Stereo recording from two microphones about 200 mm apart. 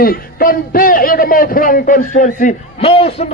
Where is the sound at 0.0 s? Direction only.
45° left (ahead or behind).